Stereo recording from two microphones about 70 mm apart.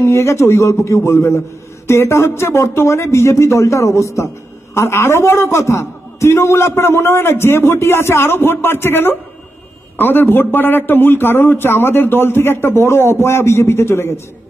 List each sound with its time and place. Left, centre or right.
0.0 s a man's voice: left